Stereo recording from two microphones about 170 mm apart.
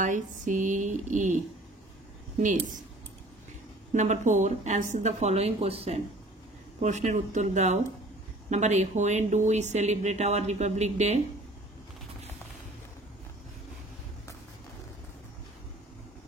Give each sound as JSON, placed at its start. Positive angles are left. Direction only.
{"t": 0.0, "sound": "speech", "side_deg": -45}
{"t": 3.9, "sound": "a woman's voice", "side_deg": -45}